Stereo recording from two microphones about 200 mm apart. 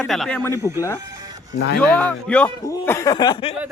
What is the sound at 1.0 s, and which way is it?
Music, 20° right (ahead or behind).